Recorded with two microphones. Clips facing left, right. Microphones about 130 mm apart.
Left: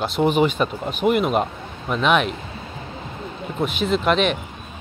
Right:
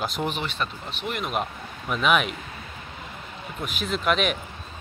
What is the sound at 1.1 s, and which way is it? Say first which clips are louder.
Speech: left 9 dB; centre (ahead or behind).